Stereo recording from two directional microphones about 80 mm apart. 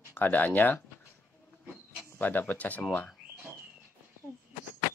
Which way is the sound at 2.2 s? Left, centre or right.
Left.